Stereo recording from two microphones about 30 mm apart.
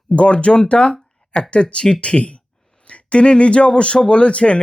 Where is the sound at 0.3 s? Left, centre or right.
Left.